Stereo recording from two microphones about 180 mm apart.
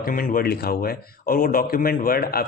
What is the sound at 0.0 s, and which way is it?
A man's voice, 50° left (ahead or behind).